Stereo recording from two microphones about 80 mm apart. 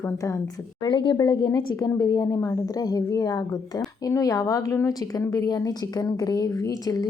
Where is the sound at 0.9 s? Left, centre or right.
Left.